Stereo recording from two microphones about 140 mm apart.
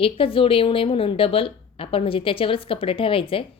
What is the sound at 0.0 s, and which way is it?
A woman's voice, 40° left (ahead or behind).